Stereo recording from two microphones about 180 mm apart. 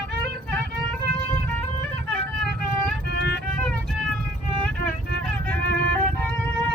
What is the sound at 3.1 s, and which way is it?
Music, 65° left (ahead or behind).